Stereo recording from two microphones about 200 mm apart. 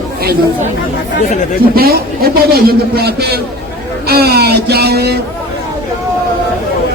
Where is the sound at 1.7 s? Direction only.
50° right (ahead or behind).